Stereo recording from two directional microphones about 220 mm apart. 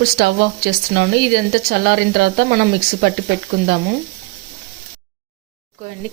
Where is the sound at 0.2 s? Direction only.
50° right (ahead or behind).